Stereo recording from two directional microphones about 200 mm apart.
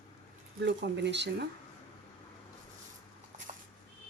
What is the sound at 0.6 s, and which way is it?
Speech, 60° right (ahead or behind).